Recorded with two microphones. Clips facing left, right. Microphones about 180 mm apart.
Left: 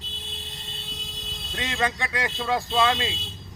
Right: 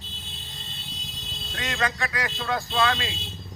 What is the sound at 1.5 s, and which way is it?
Speech, 25° left (ahead or behind).